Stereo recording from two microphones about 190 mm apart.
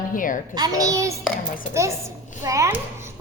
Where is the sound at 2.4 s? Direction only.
15° right (ahead or behind).